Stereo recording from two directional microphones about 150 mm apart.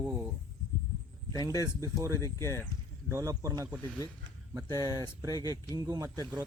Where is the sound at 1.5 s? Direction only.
20° right (ahead or behind).